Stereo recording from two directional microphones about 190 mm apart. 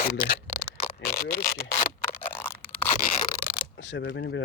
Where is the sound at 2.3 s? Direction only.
10° left (ahead or behind).